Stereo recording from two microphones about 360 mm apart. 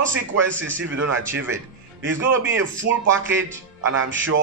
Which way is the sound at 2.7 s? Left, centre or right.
Right.